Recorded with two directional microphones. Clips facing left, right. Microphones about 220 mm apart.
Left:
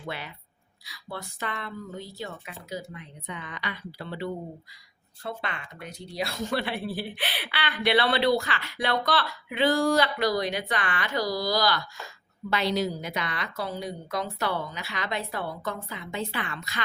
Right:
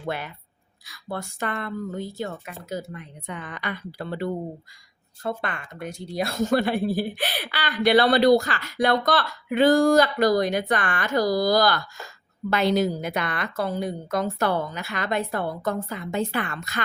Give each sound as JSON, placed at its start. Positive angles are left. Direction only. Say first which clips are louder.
{"t": 0.0, "sound": "speech", "louder": "right 6 dB", "side_deg": -50}